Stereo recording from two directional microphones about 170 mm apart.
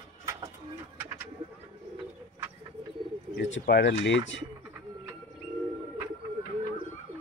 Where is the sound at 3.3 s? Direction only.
75° left (ahead or behind).